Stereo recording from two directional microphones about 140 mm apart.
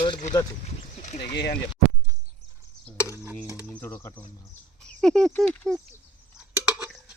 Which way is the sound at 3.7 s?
10° left (ahead or behind).